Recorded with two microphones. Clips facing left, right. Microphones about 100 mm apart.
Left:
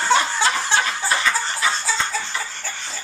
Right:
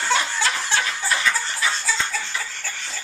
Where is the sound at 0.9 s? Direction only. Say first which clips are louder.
Left 2 dB; 25° left (ahead or behind).